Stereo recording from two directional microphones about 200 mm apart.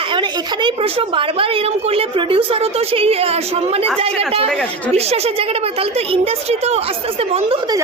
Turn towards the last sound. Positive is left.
turn(degrees=-30)  # may be behind; listen again after turning